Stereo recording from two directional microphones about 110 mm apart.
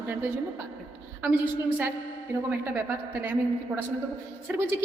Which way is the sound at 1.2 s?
15° right (ahead or behind).